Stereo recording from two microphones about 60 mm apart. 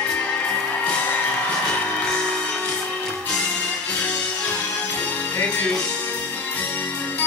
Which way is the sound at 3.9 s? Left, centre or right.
Centre.